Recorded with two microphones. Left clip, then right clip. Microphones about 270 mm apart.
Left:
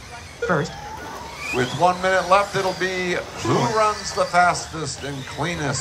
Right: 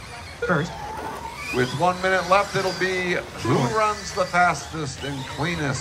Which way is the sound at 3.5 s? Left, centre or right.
Centre.